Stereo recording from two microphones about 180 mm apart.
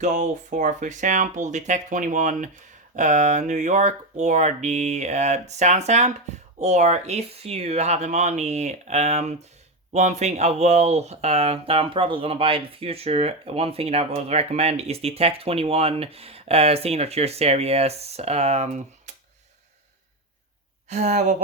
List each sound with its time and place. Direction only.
0.0 s speech: 45° right (ahead or behind)
20.9 s speech: 40° right (ahead or behind)